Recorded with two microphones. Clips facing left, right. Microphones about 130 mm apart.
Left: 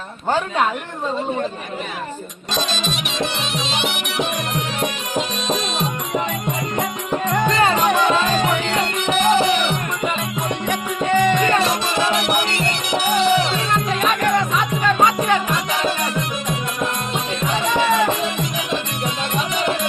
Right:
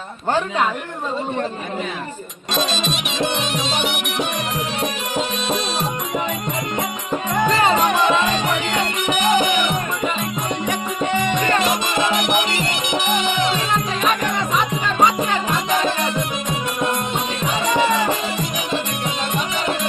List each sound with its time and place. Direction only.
3.5 s music: 45° right (ahead or behind)
9.0 s music: 15° right (ahead or behind)
13.7 s music: 5° right (ahead or behind)